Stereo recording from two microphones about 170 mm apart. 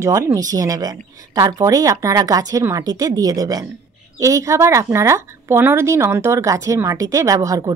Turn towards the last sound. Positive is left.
turn(degrees=-20)  # may be behind; listen again after turning